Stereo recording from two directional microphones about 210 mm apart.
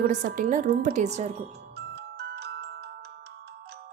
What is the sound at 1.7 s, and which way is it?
Glockenspiel, 50° right (ahead or behind).